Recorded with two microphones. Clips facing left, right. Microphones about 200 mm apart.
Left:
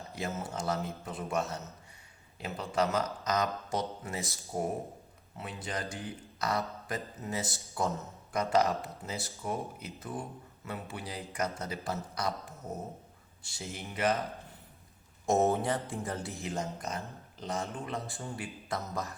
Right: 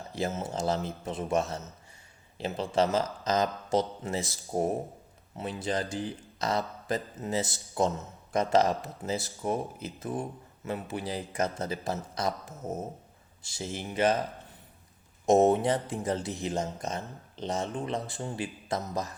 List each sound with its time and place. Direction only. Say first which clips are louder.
0.2 s speech: right 5 dB; 25° right (ahead or behind)
15.3 s speech: right 5 dB; 20° right (ahead or behind)